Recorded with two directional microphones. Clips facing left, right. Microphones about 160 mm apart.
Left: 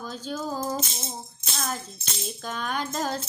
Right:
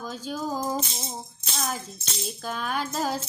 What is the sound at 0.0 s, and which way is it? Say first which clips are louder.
Music: right 1 dB; 10° right (ahead or behind).